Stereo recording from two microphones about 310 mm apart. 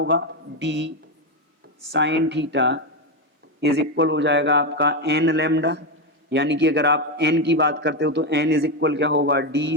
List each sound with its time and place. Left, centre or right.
0.0 s a man's voice: right